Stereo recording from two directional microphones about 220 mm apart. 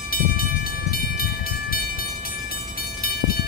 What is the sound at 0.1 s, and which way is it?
Train, 45° left (ahead or behind).